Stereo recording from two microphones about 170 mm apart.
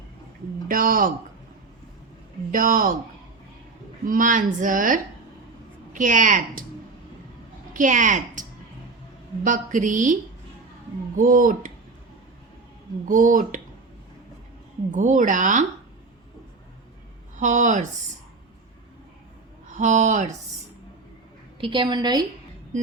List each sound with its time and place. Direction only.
0.7 s speech: 55° right (ahead or behind)
2.5 s a woman's voice: 55° right (ahead or behind)
4.0 s a woman's voice: 50° right (ahead or behind)
7.7 s a woman's voice: 50° right (ahead or behind)
11.2 s a woman's voice: 50° right (ahead or behind)
13.1 s a woman's voice: 50° right (ahead or behind)
14.9 s a woman's voice: 50° right (ahead or behind)
17.3 s a woman's voice: 45° right (ahead or behind)
19.6 s speech: 45° right (ahead or behind)
21.6 s a woman's voice: 30° right (ahead or behind)